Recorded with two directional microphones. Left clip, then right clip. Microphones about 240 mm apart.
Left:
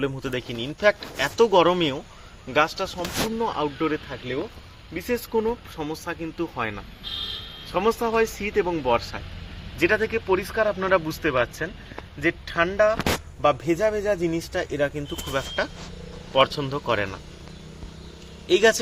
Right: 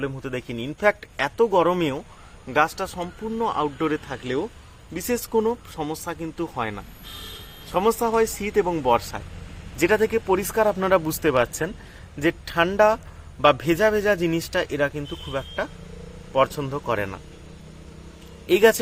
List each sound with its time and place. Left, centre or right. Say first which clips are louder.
0.0 s a man's voice: left 2 dB; centre
18.4 s a man's voice: right 2 dB; centre